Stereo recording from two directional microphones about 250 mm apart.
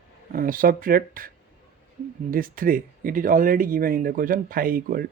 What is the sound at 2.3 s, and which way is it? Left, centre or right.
Speech, right.